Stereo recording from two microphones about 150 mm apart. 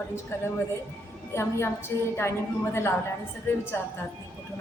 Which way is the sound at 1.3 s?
15° left (ahead or behind).